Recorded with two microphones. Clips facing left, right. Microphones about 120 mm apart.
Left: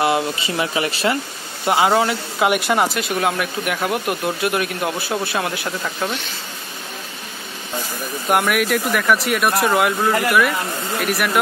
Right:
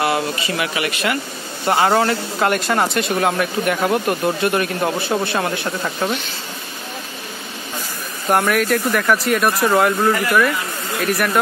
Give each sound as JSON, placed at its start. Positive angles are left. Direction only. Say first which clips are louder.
{"t": 0.0, "sound": "speech", "louder": "left 1 dB", "side_deg": 20}
{"t": 1.9, "sound": "speech", "louder": "right 1 dB", "side_deg": 10}
{"t": 8.3, "sound": "speech", "louder": "right 1 dB", "side_deg": 5}